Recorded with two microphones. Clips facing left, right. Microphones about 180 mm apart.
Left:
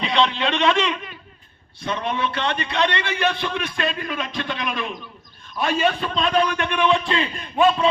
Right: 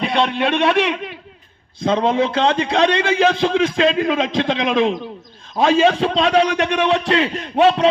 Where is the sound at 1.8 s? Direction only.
90° right.